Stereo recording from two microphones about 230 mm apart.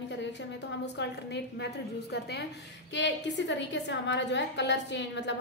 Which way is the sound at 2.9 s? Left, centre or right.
Left.